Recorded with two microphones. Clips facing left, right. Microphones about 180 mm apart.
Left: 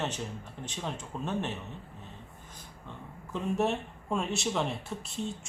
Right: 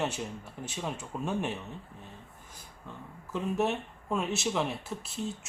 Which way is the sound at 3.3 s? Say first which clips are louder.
Even; centre (ahead or behind).